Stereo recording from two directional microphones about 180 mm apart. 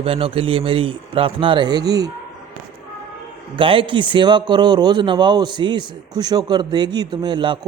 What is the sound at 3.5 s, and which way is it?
A man's voice, 30° right (ahead or behind).